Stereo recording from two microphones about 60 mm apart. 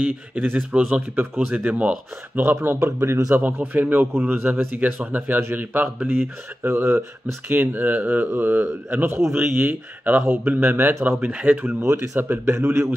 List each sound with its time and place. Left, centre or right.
0.0 s speech: right
2.4 s a man's voice: right
3.3 s speech: right
6.9 s speech: right
7.6 s speech: right
11.8 s speech: right
12.4 s a man's voice: right